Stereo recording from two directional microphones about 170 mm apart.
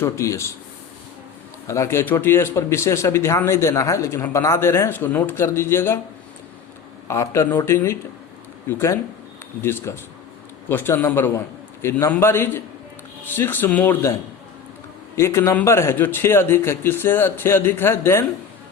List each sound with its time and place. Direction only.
0.0 s speech: 15° left (ahead or behind)
1.6 s speech: 15° left (ahead or behind)
7.1 s speech: 15° left (ahead or behind)
15.1 s speech: 15° left (ahead or behind)